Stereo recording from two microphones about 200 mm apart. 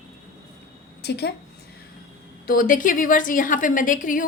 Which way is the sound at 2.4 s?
45° left (ahead or behind).